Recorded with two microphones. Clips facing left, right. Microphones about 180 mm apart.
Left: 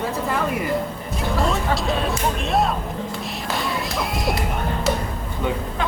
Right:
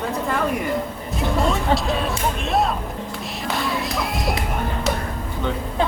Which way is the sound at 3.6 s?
Centre (ahead or behind).